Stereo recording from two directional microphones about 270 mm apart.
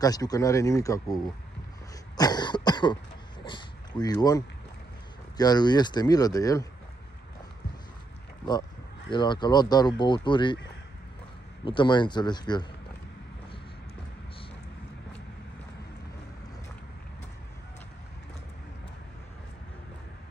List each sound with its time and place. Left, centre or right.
0.0 s speech: centre
9.1 s speech: centre
11.6 s speech: centre